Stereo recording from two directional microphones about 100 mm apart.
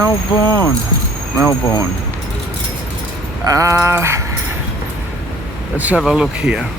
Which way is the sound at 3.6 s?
30° right (ahead or behind).